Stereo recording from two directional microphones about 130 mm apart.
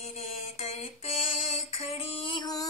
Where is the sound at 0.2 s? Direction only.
55° left (ahead or behind).